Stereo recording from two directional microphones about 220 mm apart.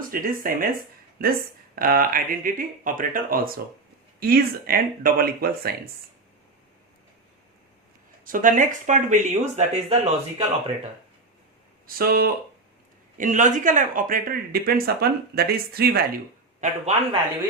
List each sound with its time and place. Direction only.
0.1 s speech: 40° right (ahead or behind)
8.2 s speech: 40° right (ahead or behind)
11.9 s speech: 40° right (ahead or behind)
16.6 s a man's voice: 30° right (ahead or behind)